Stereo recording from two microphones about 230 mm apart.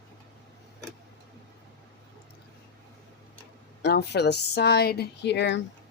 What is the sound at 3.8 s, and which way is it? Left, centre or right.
Speech, left.